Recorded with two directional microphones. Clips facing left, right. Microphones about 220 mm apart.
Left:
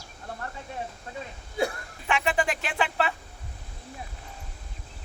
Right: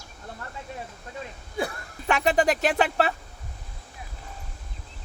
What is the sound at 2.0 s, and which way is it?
A man's voice, 40° right (ahead or behind).